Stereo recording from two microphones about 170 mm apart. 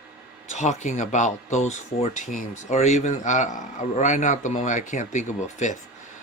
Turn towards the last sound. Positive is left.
turn(degrees=45)  # may be behind; listen again after turning